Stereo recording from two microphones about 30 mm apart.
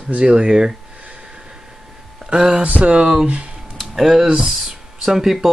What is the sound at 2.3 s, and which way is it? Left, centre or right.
Speech, right.